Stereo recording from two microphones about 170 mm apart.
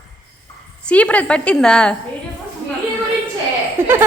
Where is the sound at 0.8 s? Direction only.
10° left (ahead or behind).